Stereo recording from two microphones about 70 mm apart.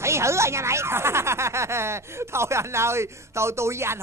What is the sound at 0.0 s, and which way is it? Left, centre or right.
Speech, right.